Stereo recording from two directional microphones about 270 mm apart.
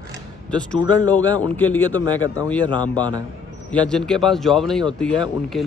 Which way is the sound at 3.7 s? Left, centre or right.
Centre.